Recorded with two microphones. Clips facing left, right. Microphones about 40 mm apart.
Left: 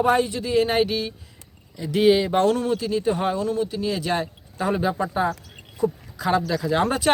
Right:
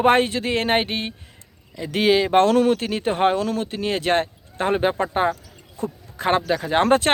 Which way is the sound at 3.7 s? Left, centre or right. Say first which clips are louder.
Right 3 dB; right.